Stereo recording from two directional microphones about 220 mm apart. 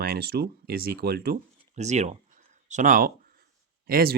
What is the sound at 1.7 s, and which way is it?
Speech, 30° right (ahead or behind).